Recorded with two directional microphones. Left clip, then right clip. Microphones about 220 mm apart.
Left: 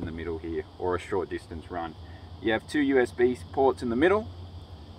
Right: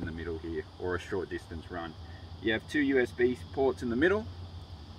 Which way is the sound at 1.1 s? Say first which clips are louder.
Left 6 dB; 30° left (ahead or behind).